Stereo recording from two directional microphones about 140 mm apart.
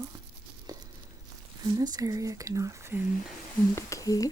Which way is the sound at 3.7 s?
20° left (ahead or behind).